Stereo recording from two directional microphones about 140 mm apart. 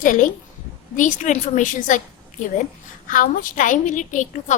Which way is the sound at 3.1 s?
75° left (ahead or behind).